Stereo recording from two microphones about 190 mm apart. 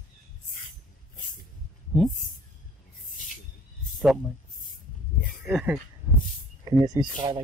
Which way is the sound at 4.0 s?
Centre (ahead or behind).